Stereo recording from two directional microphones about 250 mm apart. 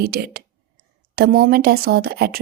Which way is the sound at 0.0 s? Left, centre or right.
Right.